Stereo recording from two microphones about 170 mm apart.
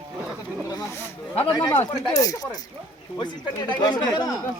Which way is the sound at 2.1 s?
20° left (ahead or behind).